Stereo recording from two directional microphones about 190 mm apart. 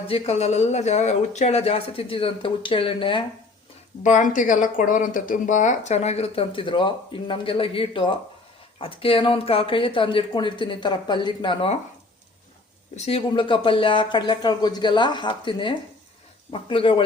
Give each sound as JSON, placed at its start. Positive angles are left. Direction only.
{"t": 0.1, "sound": "speech", "side_deg": 35}
{"t": 4.0, "sound": "speech", "side_deg": 40}
{"t": 13.1, "sound": "speech", "side_deg": 30}